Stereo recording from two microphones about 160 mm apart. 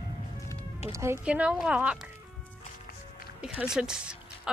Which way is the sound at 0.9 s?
15° right (ahead or behind).